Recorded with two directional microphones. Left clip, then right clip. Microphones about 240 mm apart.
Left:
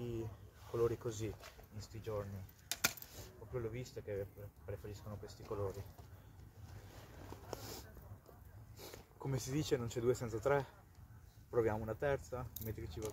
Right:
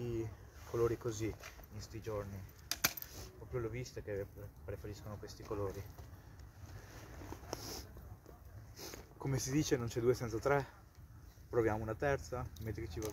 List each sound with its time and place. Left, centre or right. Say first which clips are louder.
0.7 s speech: right 1 dB; centre
2.7 s typewriter: right 1 dB; centre
4.6 s speech: right 2 dB; centre
7.2 s a sound: right 3 dB; centre
8.7 s speech: right 3 dB; centre